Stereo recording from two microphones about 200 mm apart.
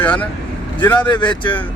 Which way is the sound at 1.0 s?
25° left (ahead or behind).